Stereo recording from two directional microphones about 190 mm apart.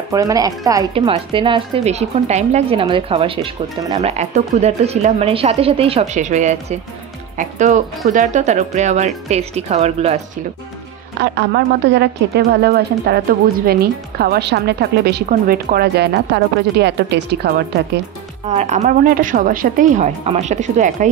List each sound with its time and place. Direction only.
0.1 s speech: 15° right (ahead or behind); by 10.2 s 35° right (ahead or behind)
11.1 s a woman's voice: 60° right (ahead or behind)
18.5 s a woman's voice: 35° right (ahead or behind)